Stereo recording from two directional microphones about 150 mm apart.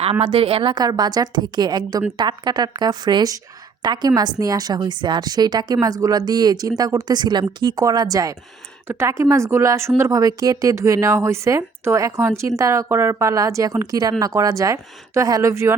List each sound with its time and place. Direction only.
0.0 s a woman's voice: 40° right (ahead or behind); by 15.7 s 20° right (ahead or behind)